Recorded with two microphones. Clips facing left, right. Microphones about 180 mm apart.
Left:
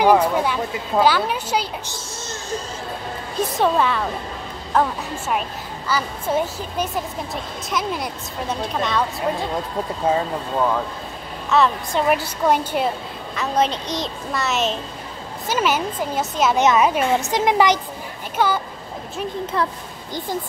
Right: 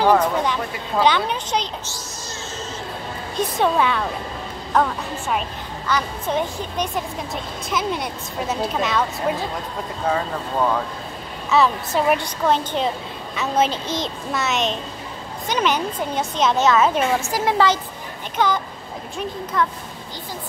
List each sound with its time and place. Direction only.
0.0 s a woman's voice: 10° left (ahead or behind)
3.3 s a woman's voice: centre (ahead or behind)
11.5 s a woman's voice: centre (ahead or behind)
13.4 s a woman's voice: 5° right (ahead or behind)
16.5 s a woman's voice: 15° left (ahead or behind)
19.5 s speech: 30° left (ahead or behind)